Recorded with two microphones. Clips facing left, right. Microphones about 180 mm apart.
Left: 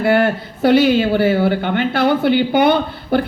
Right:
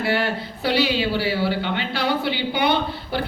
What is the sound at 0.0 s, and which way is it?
Speech, 50° left (ahead or behind).